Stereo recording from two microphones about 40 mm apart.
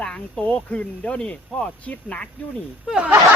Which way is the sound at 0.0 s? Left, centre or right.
Left.